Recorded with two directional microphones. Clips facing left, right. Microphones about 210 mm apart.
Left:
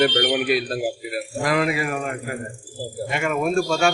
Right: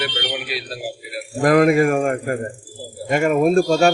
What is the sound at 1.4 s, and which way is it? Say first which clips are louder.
A man's voice: right 9 dB; 50° right (ahead or behind).